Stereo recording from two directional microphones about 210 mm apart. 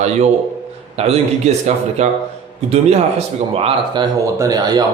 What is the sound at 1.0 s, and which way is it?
Speech, 30° right (ahead or behind).